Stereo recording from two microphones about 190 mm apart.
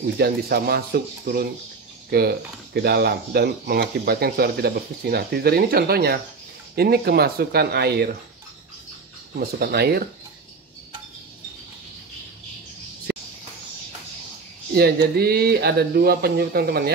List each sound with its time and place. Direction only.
0.2 s speech: 55° right (ahead or behind)
9.3 s speech: 55° right (ahead or behind)
14.7 s speech: 55° right (ahead or behind)